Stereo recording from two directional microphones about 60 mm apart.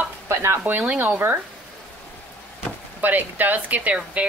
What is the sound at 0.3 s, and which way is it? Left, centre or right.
Stir, right.